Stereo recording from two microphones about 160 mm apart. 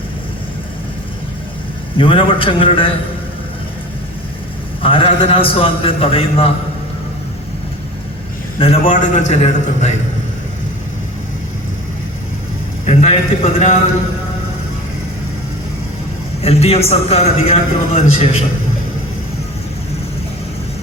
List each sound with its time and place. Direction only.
2.0 s a man's voice: 35° left (ahead or behind)
4.8 s a man's voice: 35° left (ahead or behind)
8.5 s a man's voice: 35° left (ahead or behind)
9.1 s a man's voice: 45° left (ahead or behind)
12.8 s a man's voice: 45° left (ahead or behind)
16.4 s a man's voice: 40° left (ahead or behind)